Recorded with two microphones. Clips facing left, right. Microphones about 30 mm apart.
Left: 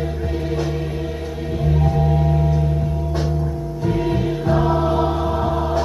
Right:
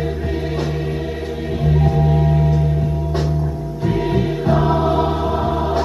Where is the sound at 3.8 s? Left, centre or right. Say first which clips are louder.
Right 2 dB; centre.